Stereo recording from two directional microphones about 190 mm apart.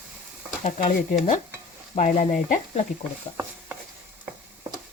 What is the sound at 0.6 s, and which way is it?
Speech, 40° left (ahead or behind).